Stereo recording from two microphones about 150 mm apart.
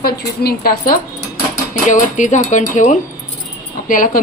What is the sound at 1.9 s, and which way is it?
A woman's voice, 55° left (ahead or behind).